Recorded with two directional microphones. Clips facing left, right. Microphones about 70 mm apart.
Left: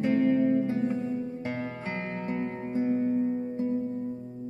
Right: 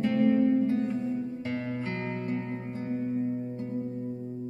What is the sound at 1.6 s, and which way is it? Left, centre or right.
Music, left.